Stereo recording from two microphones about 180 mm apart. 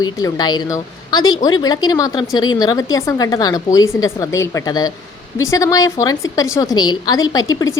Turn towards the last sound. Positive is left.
turn(degrees=25)  # may be behind; listen again after turning